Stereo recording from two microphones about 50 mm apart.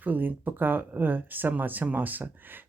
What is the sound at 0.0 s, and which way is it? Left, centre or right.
Speech, right.